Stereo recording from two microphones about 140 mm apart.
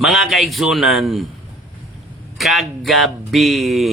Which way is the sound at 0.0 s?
Centre (ahead or behind).